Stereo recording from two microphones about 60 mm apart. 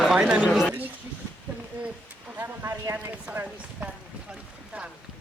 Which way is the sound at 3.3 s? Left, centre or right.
Right.